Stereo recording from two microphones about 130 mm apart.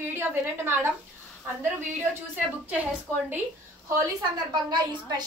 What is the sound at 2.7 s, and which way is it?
Speech, 10° right (ahead or behind).